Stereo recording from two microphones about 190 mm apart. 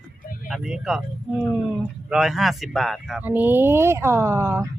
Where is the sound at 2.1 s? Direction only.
Centre (ahead or behind).